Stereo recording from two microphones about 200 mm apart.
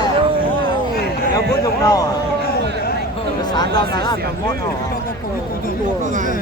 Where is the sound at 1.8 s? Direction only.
15° left (ahead or behind).